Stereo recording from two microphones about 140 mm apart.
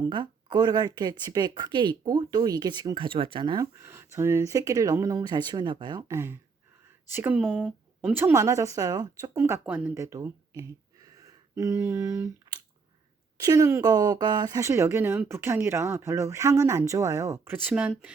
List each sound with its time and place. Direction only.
0.1 s a woman's voice: 35° right (ahead or behind)
3.6 s speech: 20° right (ahead or behind)
6.1 s speech: 20° right (ahead or behind)
11.5 s a sound: 20° right (ahead or behind)
13.3 s speech: 25° right (ahead or behind)